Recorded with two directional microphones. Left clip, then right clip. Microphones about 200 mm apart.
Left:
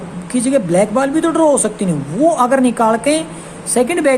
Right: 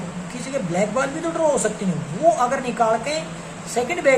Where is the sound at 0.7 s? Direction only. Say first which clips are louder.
Left 5 dB; 55° left (ahead or behind).